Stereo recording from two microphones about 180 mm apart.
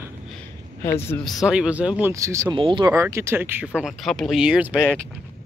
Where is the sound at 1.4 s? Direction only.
5° right (ahead or behind).